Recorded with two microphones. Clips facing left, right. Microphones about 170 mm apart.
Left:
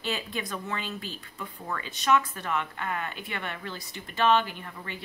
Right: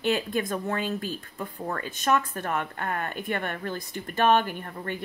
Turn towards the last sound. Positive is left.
turn(degrees=-50)  # may be behind; listen again after turning